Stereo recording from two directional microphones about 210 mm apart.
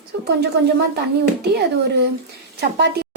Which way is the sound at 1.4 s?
50° right (ahead or behind).